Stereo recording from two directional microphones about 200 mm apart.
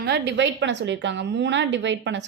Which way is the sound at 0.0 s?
60° right (ahead or behind).